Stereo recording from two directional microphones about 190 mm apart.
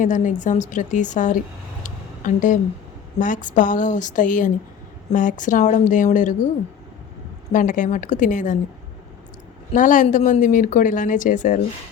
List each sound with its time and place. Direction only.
0.0 s speech: 40° left (ahead or behind)
1.8 s a sound: 40° left (ahead or behind)
3.2 s speech: 45° left (ahead or behind)
7.5 s speech: 45° left (ahead or behind)
9.7 s speech: 40° left (ahead or behind)